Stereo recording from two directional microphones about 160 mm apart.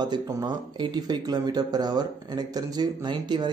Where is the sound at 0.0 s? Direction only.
25° right (ahead or behind).